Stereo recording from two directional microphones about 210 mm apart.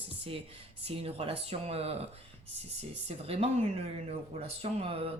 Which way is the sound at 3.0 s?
30° right (ahead or behind).